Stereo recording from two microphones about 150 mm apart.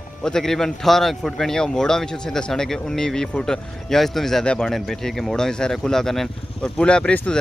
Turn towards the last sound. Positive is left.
turn(degrees=5)  # may be behind; listen again after turning